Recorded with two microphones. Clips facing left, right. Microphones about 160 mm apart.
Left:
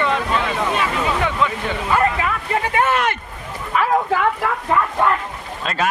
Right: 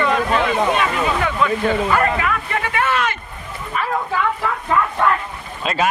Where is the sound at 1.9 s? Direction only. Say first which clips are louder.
Even; 25° left (ahead or behind).